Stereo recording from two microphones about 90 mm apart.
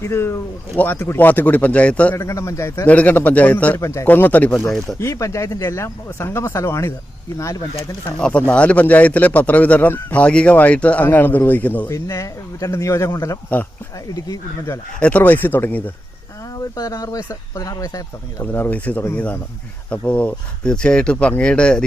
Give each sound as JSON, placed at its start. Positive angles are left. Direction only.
{"t": 0.0, "sound": "a man's voice", "side_deg": 30}
{"t": 2.1, "sound": "speech", "side_deg": 30}
{"t": 2.8, "sound": "a man's voice", "side_deg": 15}
{"t": 3.8, "sound": "speech", "side_deg": 35}
{"t": 4.0, "sound": "a man's voice", "side_deg": 20}
{"t": 4.9, "sound": "speech", "side_deg": 35}
{"t": 8.2, "sound": "a man's voice", "side_deg": 15}
{"t": 11.9, "sound": "speech", "side_deg": 30}
{"t": 15.0, "sound": "a man's voice", "side_deg": 15}
{"t": 16.6, "sound": "speech", "side_deg": 40}
{"t": 18.5, "sound": "a man's voice", "side_deg": 20}